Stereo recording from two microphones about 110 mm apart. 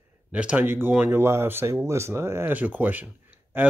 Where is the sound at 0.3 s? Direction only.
10° right (ahead or behind).